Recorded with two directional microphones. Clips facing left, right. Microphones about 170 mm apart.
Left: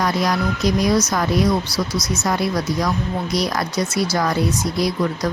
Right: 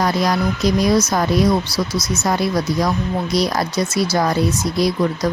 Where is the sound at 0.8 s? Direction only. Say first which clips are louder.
Right 2 dB; 30° right (ahead or behind).